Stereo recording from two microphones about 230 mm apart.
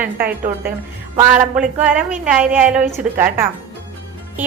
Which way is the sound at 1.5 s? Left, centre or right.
Centre.